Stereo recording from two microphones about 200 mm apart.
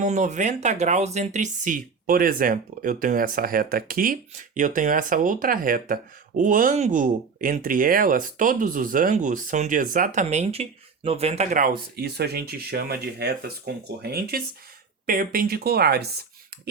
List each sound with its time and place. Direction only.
0.0 s speech: 35° right (ahead or behind)
11.9 s speech: 55° right (ahead or behind)